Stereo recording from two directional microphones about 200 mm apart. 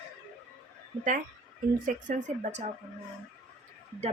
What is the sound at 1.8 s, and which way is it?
Speech, 40° right (ahead or behind).